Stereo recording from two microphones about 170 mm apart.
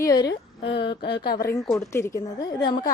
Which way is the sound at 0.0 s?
20° left (ahead or behind).